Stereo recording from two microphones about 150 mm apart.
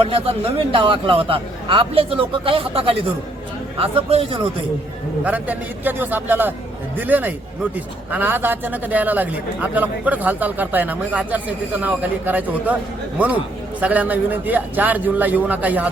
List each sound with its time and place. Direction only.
0.0 s speech: 40° right (ahead or behind)
5.2 s a man's voice: 10° right (ahead or behind)